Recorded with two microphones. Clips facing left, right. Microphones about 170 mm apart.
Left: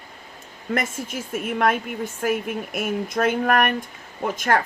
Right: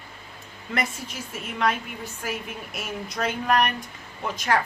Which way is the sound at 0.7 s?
50° left (ahead or behind).